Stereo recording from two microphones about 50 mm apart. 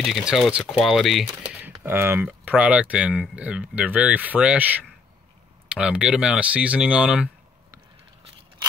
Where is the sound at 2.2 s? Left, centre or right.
Right.